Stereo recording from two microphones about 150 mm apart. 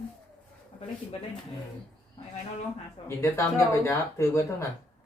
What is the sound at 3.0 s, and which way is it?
Speech, 35° left (ahead or behind).